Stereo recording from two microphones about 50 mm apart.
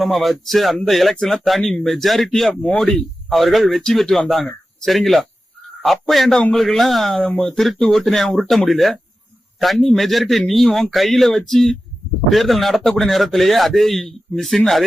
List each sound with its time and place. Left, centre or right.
0.0 s a man's voice: centre
2.6 s speech: centre
3.2 s a man's voice: centre